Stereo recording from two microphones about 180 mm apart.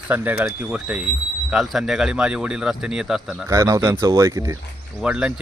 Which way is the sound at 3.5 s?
15° right (ahead or behind).